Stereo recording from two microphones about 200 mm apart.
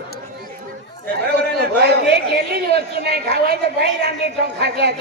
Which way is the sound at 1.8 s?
55° right (ahead or behind).